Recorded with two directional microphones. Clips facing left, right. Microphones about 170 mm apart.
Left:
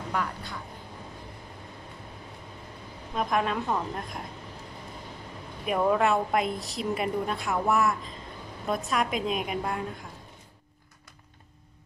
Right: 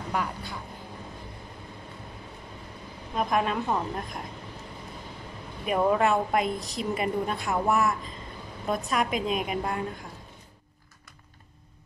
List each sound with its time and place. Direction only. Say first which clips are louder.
0.1 s speech: right 1 dB; 10° right (ahead or behind)
3.2 s a woman's voice: right 1 dB; centre (ahead or behind)
5.7 s a woman's voice: right 1 dB; centre (ahead or behind)